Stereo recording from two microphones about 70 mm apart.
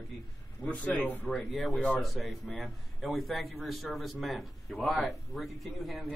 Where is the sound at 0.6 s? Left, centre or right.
Left.